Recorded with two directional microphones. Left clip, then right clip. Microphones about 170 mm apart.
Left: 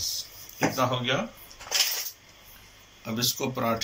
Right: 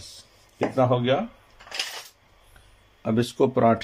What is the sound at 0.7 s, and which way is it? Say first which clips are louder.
Speech: right 7 dB; 55° right (ahead or behind).